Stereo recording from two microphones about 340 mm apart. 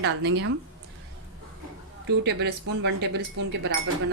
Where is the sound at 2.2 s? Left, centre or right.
Right.